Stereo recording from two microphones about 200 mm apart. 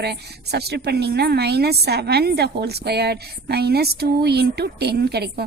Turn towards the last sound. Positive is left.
turn(degrees=-55)  # may be behind; listen again after turning